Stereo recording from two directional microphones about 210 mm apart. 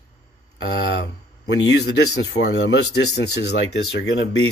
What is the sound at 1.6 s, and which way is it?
Speech, 55° left (ahead or behind).